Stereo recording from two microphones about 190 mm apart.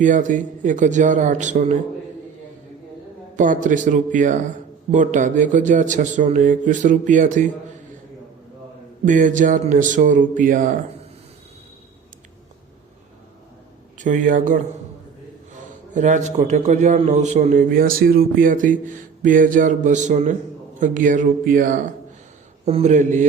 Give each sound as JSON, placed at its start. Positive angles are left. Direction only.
{"t": 0.0, "sound": "a man's voice", "side_deg": -40}
{"t": 3.3, "sound": "a man's voice", "side_deg": -40}
{"t": 9.0, "sound": "speech", "side_deg": -45}
{"t": 14.0, "sound": "a man's voice", "side_deg": -40}